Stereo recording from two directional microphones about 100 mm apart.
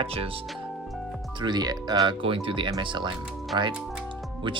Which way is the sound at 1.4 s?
45° right (ahead or behind).